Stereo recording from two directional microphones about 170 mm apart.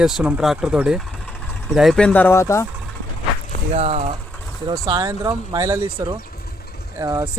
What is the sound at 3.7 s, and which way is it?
Speech, 40° right (ahead or behind).